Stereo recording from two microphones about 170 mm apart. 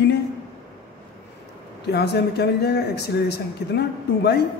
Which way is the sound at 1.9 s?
75° left (ahead or behind).